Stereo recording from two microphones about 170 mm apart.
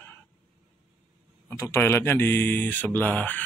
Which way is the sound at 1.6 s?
15° left (ahead or behind).